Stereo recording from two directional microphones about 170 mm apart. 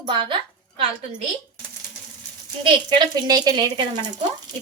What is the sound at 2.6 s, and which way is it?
A woman's voice, 25° right (ahead or behind).